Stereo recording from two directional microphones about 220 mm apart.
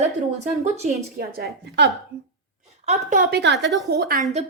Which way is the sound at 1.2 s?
45° right (ahead or behind).